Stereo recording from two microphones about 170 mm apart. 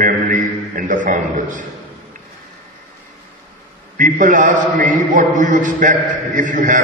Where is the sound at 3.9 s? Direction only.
50° right (ahead or behind).